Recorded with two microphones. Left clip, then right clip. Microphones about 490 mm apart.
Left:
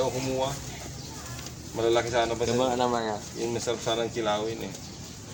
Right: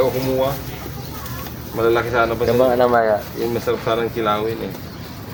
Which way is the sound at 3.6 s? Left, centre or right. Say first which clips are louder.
Right 9 dB; left.